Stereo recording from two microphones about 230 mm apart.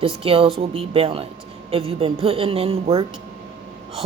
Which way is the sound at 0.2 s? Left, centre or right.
Right.